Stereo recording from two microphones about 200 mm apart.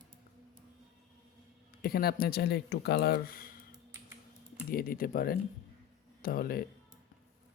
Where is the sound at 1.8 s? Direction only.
50° left (ahead or behind).